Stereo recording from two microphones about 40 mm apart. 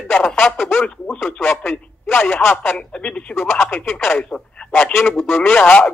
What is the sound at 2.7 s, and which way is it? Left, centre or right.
Speech, left.